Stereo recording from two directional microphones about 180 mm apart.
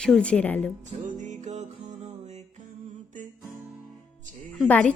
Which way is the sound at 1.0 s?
45° right (ahead or behind).